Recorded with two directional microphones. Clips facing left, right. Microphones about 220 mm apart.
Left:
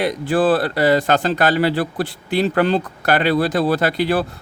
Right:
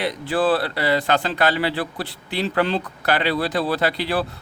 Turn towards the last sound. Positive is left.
turn(degrees=45)  # may be behind; listen again after turning